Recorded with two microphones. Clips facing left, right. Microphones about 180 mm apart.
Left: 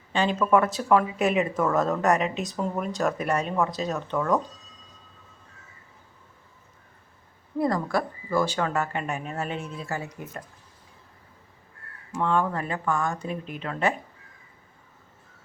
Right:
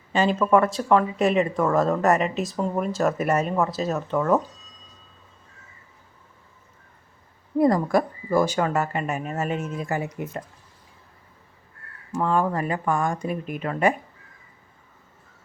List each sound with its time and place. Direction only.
0.1 s speech: 5° right (ahead or behind)
7.6 s speech: 20° right (ahead or behind)
9.9 s speech: 15° right (ahead or behind)
12.2 s speech: 5° right (ahead or behind)